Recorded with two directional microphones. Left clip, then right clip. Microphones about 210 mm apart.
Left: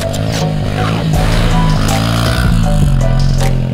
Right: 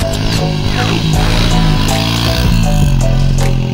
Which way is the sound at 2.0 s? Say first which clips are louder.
Right 1 dB; 15° left (ahead or behind).